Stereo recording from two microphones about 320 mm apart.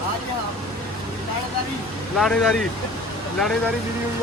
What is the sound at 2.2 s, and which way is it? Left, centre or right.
Speech, centre.